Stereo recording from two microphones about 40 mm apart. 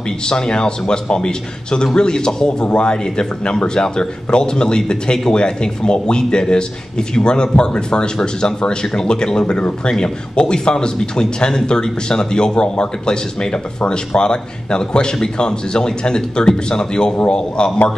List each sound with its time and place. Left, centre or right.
0.3 s speech: left